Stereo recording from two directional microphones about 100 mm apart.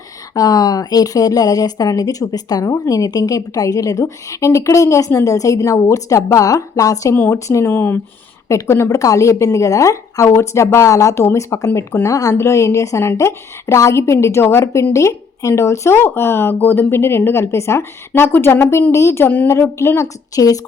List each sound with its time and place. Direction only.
0.3 s a woman's voice: 40° left (ahead or behind); by 20.1 s 25° left (ahead or behind)
20.3 s a woman's voice: 35° left (ahead or behind)